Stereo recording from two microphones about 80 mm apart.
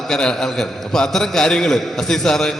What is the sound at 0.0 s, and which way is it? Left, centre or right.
A man's voice, centre.